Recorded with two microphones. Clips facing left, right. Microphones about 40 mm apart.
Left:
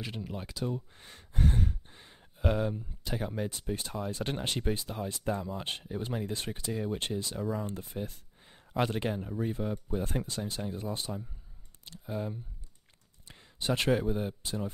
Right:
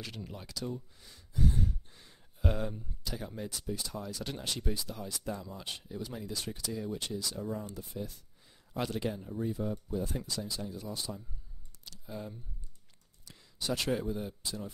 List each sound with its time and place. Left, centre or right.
0.3 s speech: left
0.7 s speech: left
1.9 s a sound: left
2.3 s speech: centre
13.3 s a sound: left
14.0 s speech: left